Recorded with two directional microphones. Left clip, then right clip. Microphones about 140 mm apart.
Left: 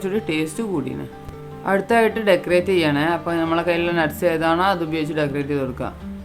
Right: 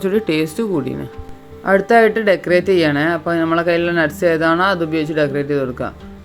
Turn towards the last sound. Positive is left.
turn(degrees=-25)  # may be behind; listen again after turning